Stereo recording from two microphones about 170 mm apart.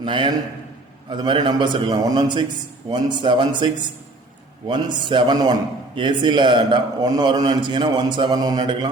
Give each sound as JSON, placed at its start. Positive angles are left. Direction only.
{"t": 0.0, "sound": "a man's voice", "side_deg": -30}
{"t": 4.7, "sound": "a man's voice", "side_deg": -30}